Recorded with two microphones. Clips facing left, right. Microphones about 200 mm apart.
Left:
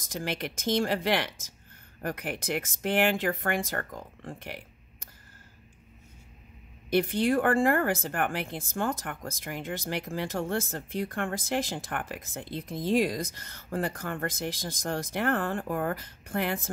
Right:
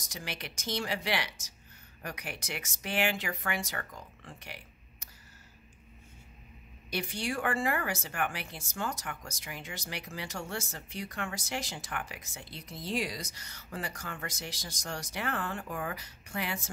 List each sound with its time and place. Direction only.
0.0 s speech: 55° left (ahead or behind)
6.9 s speech: 55° left (ahead or behind)